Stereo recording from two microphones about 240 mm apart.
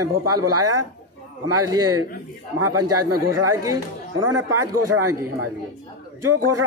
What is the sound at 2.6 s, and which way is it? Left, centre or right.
Speech, right.